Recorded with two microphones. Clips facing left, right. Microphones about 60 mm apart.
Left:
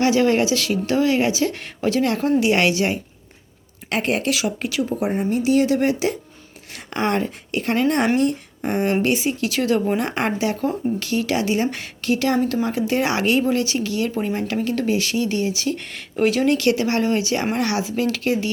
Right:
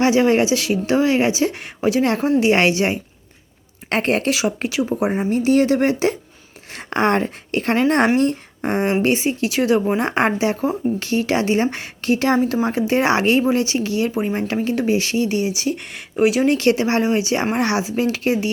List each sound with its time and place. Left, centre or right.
0.0 s speech: right
2.4 s speech: right
3.8 s speech: right
4.3 s speech: right
5.3 s speech: right; by 16.5 s centre
16.5 s speech: right